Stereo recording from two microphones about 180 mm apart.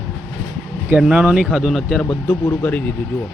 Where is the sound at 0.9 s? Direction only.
5° right (ahead or behind).